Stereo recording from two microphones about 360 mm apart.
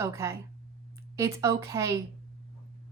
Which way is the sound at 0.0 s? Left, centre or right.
Centre.